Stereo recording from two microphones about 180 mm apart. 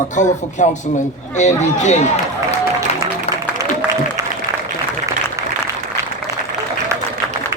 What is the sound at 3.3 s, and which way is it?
Music, 35° left (ahead or behind).